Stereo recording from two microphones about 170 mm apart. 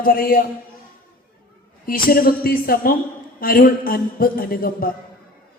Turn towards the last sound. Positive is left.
turn(degrees=60)  # may be behind; listen again after turning